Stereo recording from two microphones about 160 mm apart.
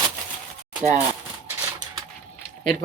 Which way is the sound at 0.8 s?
15° right (ahead or behind).